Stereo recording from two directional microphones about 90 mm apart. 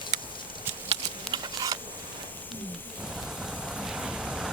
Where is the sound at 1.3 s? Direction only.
50° right (ahead or behind).